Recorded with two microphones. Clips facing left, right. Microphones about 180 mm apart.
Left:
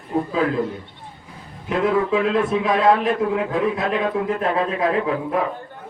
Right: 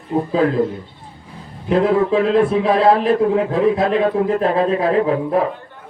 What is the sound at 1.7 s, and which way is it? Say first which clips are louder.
A man's voice: right 4 dB; 35° right (ahead or behind).